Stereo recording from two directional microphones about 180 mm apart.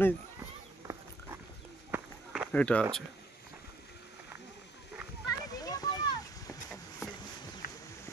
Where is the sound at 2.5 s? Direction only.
5° left (ahead or behind).